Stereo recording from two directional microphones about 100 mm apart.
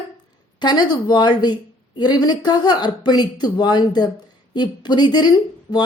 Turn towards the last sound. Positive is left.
turn(degrees=45)  # may be behind; listen again after turning